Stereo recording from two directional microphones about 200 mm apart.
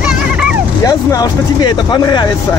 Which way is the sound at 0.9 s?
20° left (ahead or behind).